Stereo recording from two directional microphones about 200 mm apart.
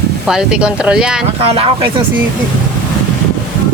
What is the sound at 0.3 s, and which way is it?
Speech, 5° right (ahead or behind).